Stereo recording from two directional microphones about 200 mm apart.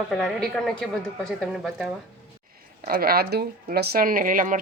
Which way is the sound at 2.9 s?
50° right (ahead or behind).